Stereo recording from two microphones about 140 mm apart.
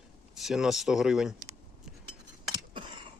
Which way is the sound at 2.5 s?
35° right (ahead or behind).